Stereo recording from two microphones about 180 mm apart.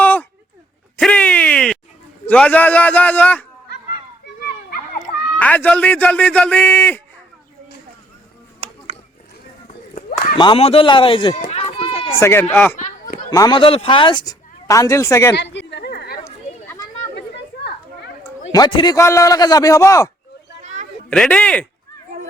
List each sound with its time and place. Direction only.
0.0 s a sound: 10° left (ahead or behind)
2.2 s a man's voice: 5° left (ahead or behind)
4.9 s a man's voice: 10° left (ahead or behind)
10.3 s speech: 30° left (ahead or behind)
12.2 s a man's voice: 15° left (ahead or behind)
12.7 s a sound: 45° left (ahead or behind)
13.3 s speech: 20° left (ahead or behind)
13.6 s speech: 30° left (ahead or behind); by 15.3 s 15° left (ahead or behind)
15.5 s a sound: 65° left (ahead or behind)
18.5 s a man's voice: 20° left (ahead or behind)
20.6 s a sound: 40° right (ahead or behind)
21.1 s a man's voice: 5° left (ahead or behind)